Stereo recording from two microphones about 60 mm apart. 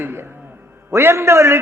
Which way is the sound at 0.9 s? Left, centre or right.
Right.